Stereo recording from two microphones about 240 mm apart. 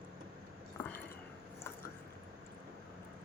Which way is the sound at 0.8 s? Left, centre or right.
Centre.